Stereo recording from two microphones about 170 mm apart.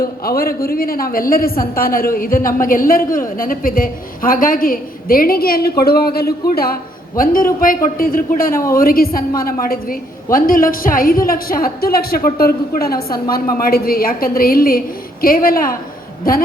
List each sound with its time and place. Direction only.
0.0 s a woman's voice: 60° left (ahead or behind)